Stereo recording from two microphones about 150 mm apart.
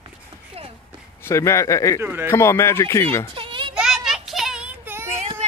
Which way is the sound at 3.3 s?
35° right (ahead or behind).